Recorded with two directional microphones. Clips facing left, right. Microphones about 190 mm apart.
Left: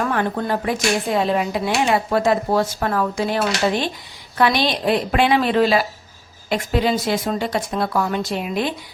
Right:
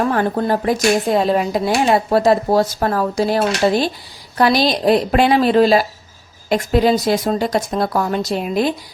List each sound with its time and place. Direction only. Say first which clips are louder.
0.0 s speech: right 4 dB; 35° right (ahead or behind)